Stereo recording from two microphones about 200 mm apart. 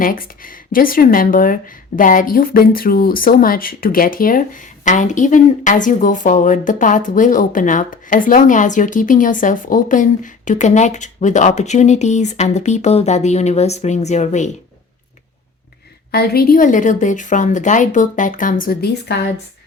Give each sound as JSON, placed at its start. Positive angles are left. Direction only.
{"t": 0.0, "sound": "speech", "side_deg": 45}
{"t": 16.1, "sound": "a woman's voice", "side_deg": 50}